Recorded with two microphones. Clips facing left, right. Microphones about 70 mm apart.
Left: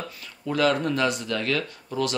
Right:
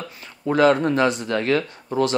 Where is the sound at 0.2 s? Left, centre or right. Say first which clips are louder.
Right 6 dB; right.